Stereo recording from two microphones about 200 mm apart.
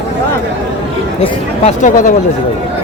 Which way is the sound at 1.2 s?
35° left (ahead or behind).